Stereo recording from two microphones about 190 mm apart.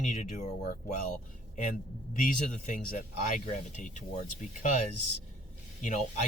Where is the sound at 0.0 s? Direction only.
40° left (ahead or behind).